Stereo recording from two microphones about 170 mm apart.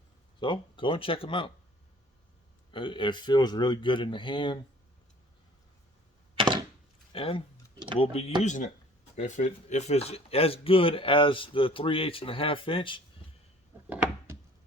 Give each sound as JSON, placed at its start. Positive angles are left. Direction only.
{"t": 0.3, "sound": "speech", "side_deg": 30}
{"t": 2.7, "sound": "speech", "side_deg": 30}
{"t": 6.3, "sound": "a sound", "side_deg": -30}
{"t": 7.1, "sound": "speech", "side_deg": 30}